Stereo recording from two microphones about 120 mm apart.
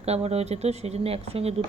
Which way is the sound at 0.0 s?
60° right (ahead or behind).